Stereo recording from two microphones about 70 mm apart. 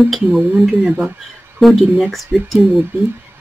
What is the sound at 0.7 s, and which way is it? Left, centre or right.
Speech, centre.